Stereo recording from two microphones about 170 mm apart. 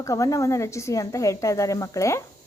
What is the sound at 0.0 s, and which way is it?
A woman's voice, 20° left (ahead or behind).